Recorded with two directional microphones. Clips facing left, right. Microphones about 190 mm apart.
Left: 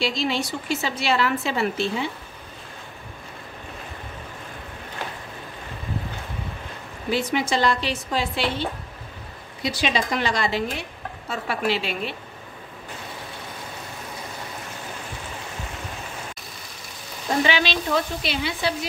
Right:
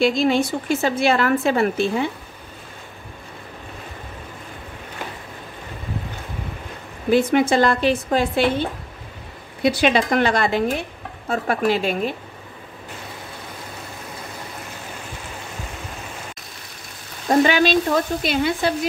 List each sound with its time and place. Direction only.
0.0 s speech: 50° right (ahead or behind)
7.1 s speech: 50° right (ahead or behind)
17.4 s speech: 45° right (ahead or behind)